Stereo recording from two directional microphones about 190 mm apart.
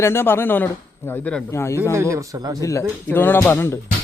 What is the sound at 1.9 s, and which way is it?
Speech, 15° right (ahead or behind).